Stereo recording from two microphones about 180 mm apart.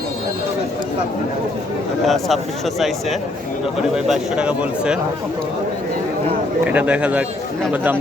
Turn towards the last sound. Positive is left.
turn(degrees=-10)  # may be behind; listen again after turning